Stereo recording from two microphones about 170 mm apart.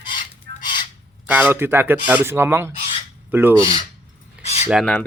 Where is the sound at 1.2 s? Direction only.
10° right (ahead or behind).